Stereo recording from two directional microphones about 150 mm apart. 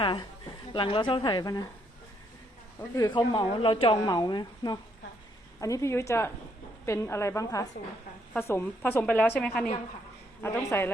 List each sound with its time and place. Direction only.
0.0 s a woman's voice: 30° left (ahead or behind)
2.9 s a woman's voice: 30° left (ahead or behind)